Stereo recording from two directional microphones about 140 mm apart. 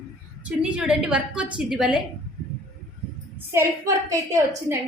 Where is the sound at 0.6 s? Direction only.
5° right (ahead or behind).